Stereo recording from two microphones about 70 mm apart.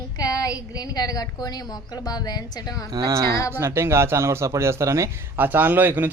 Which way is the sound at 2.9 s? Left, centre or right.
Right.